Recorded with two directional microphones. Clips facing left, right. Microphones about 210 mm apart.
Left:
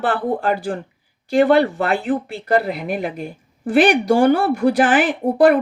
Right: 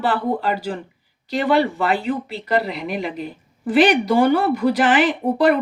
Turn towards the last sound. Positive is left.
turn(degrees=50)  # may be behind; listen again after turning